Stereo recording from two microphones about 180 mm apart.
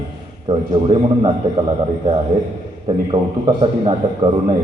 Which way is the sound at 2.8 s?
30° right (ahead or behind).